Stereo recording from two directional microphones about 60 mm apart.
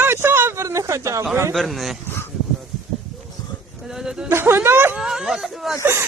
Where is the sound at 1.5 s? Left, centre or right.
Centre.